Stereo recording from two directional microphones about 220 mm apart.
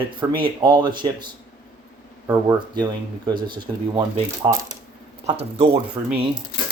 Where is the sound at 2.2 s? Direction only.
15° right (ahead or behind).